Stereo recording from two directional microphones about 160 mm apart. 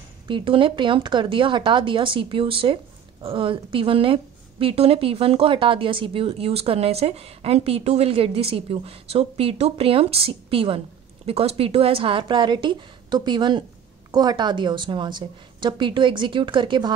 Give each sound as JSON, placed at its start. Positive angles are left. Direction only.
{"t": 0.3, "sound": "a woman's voice", "side_deg": -30}